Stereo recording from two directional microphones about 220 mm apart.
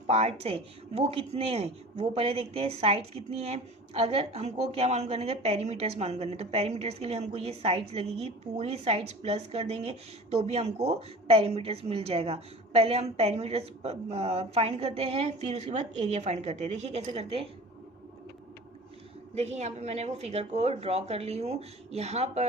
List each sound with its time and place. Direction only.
0.1 s speech: 30° right (ahead or behind)
19.3 s speech: 30° right (ahead or behind)